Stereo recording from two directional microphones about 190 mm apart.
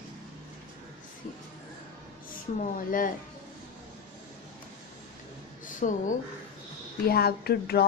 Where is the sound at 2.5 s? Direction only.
45° left (ahead or behind).